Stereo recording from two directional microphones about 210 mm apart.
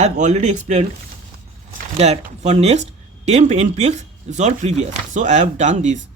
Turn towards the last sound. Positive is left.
turn(degrees=-35)  # may be behind; listen again after turning